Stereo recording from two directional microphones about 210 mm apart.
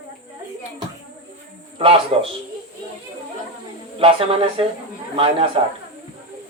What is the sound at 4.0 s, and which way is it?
Speech, 25° right (ahead or behind).